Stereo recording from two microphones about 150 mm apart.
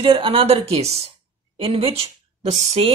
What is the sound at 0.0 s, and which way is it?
Speech, 35° right (ahead or behind).